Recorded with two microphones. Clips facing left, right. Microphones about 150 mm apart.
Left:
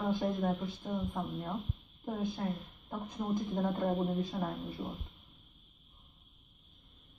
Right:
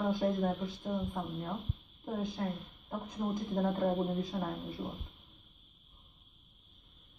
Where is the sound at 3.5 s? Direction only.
Centre (ahead or behind).